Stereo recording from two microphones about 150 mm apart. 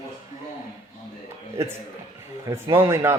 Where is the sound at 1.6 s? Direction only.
20° right (ahead or behind).